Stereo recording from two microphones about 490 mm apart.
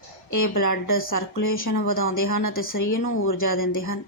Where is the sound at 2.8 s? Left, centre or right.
Left.